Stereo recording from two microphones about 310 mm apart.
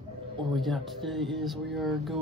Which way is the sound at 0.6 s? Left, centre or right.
Centre.